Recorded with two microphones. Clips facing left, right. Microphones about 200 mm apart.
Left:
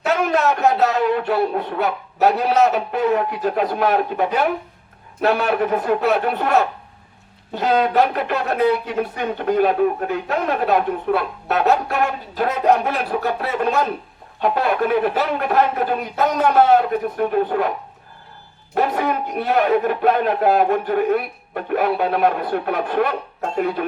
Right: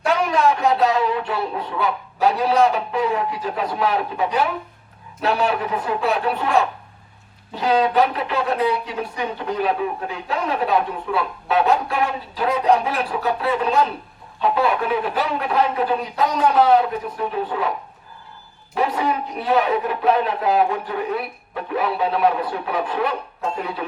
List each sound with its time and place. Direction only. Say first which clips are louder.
0.3 s speech: left 1 dB; 45° left (ahead or behind)
18.7 s speech: left 2 dB; 50° left (ahead or behind)